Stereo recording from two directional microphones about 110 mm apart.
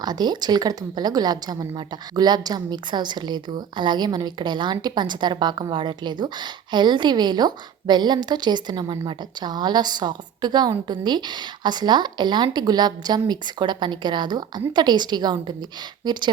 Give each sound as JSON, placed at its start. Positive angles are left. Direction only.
{"t": 0.0, "sound": "a woman's voice", "side_deg": -40}